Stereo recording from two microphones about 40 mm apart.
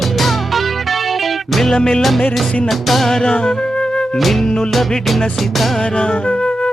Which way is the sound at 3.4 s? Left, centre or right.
Centre.